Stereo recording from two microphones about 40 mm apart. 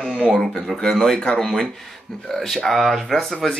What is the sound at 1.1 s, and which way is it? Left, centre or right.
Speech, left.